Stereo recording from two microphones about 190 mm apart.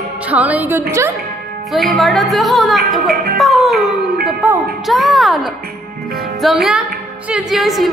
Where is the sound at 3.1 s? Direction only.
50° right (ahead or behind).